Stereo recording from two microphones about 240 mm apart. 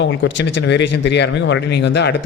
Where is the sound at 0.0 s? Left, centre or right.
Left.